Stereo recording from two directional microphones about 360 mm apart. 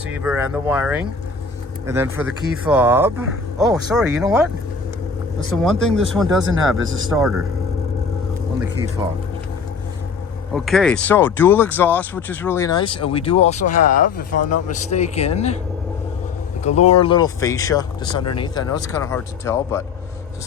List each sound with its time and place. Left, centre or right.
0.1 s a man's voice: centre
6.4 s speech: right
7.1 s a man's voice: centre
10.5 s speech: centre
16.9 s speech: centre